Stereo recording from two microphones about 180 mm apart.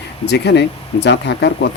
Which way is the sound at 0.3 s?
70° left (ahead or behind).